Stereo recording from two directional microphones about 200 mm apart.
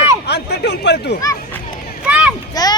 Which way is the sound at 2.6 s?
20° left (ahead or behind).